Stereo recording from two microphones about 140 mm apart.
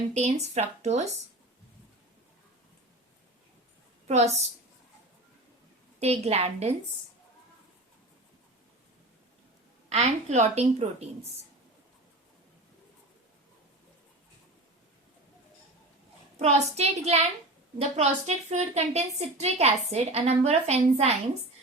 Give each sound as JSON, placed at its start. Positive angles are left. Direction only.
{"t": 0.1, "sound": "a woman's voice", "side_deg": -55}
{"t": 4.1, "sound": "a woman's voice", "side_deg": -50}
{"t": 6.0, "sound": "a woman's voice", "side_deg": -50}
{"t": 9.9, "sound": "a woman's voice", "side_deg": -50}
{"t": 16.4, "sound": "a woman's voice", "side_deg": -50}